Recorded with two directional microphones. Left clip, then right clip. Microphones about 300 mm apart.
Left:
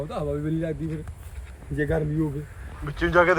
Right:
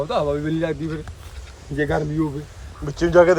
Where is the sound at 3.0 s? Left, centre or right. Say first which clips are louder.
Right 5 dB; centre.